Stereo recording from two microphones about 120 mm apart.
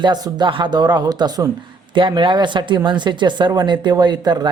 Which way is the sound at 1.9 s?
45° right (ahead or behind).